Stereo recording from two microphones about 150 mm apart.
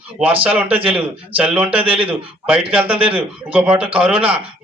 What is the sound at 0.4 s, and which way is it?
A man's voice, 10° right (ahead or behind).